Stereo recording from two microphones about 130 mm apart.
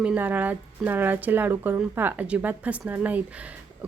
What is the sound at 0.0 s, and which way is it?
Speech, 10° right (ahead or behind).